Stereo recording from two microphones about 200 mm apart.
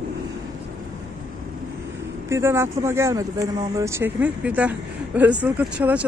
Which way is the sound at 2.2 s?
15° right (ahead or behind).